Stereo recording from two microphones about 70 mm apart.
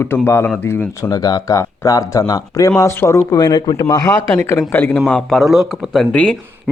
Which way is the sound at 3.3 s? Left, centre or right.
Left.